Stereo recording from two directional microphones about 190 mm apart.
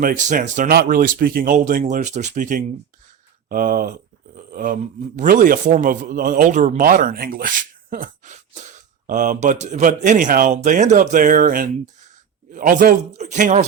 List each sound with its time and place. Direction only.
0.0 s speech: 45° right (ahead or behind)